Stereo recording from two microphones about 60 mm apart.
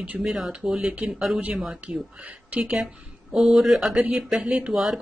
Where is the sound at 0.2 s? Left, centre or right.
Centre.